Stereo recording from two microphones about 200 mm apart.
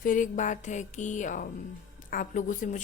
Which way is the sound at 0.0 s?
40° left (ahead or behind).